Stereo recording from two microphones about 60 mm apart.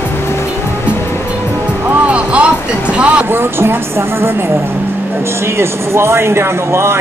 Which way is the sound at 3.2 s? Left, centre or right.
Right.